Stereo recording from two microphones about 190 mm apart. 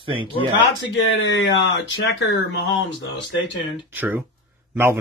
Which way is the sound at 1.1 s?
70° left (ahead or behind).